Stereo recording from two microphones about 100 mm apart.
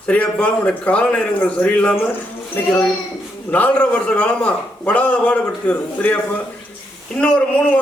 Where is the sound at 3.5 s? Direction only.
15° left (ahead or behind).